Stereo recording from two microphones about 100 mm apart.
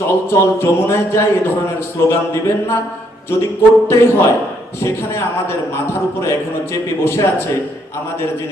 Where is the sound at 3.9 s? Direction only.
25° left (ahead or behind).